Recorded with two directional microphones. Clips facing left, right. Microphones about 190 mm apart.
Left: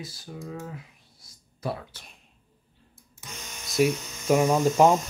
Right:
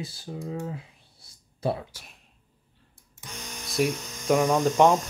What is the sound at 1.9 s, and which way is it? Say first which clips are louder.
Speech: even; 5° right (ahead or behind).